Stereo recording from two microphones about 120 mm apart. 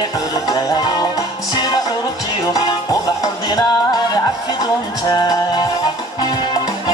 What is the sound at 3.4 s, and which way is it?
Music, 35° left (ahead or behind).